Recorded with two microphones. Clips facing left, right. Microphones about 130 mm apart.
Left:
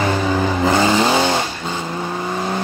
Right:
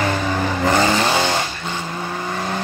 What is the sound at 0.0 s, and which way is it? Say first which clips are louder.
Vehicle: left 3 dB; 10° left (ahead or behind).